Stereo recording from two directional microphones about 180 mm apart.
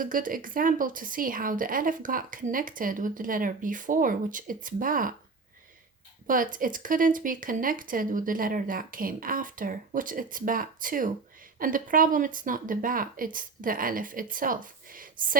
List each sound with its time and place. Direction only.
0.0 s a woman's voice: 50° right (ahead or behind)
6.2 s a woman's voice: 50° right (ahead or behind)